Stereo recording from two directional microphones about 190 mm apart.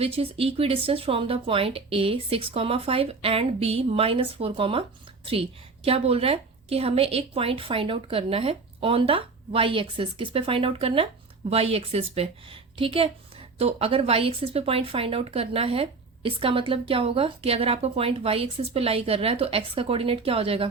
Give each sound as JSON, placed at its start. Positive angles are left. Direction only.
{"t": 0.0, "sound": "speech", "side_deg": -30}